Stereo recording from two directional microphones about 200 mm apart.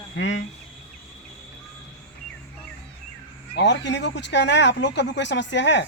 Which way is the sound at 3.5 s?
60° left (ahead or behind).